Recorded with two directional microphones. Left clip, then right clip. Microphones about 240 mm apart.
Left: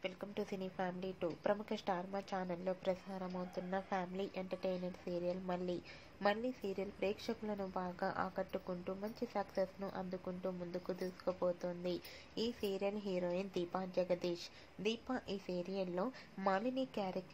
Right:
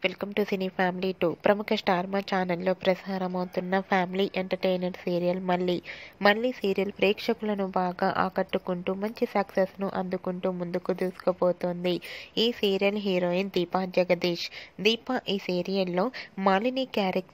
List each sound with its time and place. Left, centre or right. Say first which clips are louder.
0.0 s a woman's voice: right 15 dB; right